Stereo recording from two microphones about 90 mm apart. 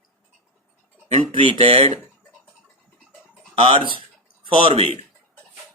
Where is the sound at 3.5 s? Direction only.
90° right.